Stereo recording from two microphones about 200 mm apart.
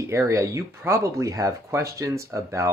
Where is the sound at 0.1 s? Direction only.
15° right (ahead or behind).